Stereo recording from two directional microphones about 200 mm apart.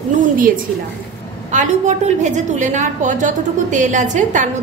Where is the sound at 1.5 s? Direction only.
35° right (ahead or behind).